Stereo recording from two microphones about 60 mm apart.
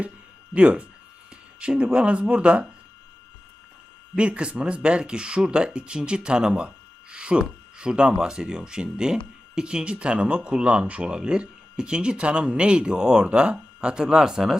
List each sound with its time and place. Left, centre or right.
0.5 s speech: centre
4.2 s speech: centre